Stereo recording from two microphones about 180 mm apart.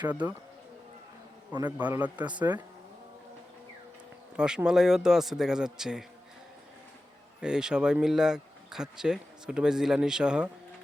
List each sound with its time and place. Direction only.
0.0 s a man's voice: 10° right (ahead or behind)
1.8 s a man's voice: 10° right (ahead or behind)
4.4 s speech: 5° right (ahead or behind)
7.4 s speech: 5° right (ahead or behind)